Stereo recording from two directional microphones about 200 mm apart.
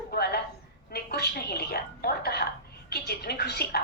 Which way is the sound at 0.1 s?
50° left (ahead or behind).